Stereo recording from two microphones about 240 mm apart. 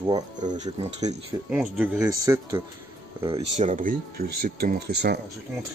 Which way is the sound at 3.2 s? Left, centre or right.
Right.